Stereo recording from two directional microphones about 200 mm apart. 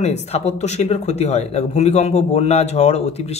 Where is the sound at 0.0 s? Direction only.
35° left (ahead or behind).